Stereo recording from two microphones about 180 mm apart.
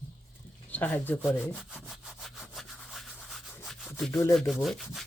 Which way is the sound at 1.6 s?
Centre (ahead or behind).